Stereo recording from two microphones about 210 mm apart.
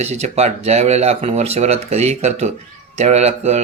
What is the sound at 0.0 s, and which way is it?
Speech, 30° right (ahead or behind).